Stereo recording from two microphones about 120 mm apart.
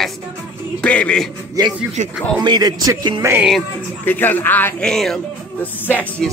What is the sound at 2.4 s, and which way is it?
Speech, 35° right (ahead or behind).